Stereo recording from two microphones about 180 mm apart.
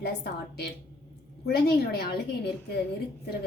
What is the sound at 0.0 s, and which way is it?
A woman's voice, 65° left (ahead or behind).